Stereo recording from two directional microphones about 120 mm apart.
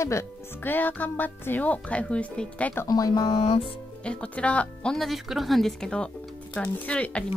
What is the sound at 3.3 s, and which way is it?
Music, 45° left (ahead or behind).